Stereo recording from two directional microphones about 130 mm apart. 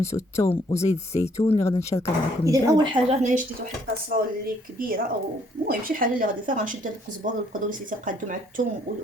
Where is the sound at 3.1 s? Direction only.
70° right (ahead or behind).